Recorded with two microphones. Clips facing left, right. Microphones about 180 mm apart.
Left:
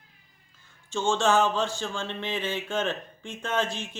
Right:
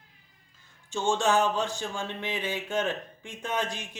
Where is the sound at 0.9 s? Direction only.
15° right (ahead or behind).